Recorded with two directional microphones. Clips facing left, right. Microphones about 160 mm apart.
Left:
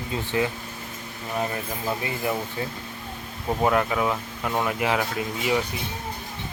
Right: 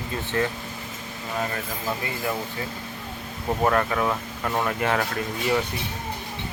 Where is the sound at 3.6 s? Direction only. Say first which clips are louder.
Even; 10° left (ahead or behind).